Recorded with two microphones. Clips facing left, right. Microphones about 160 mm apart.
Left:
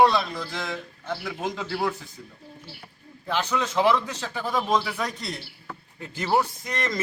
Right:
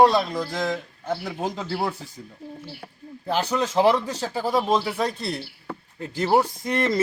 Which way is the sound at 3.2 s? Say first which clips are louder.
Right 3 dB; 35° right (ahead or behind).